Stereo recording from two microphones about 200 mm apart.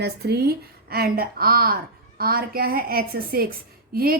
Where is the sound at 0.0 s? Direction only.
55° right (ahead or behind).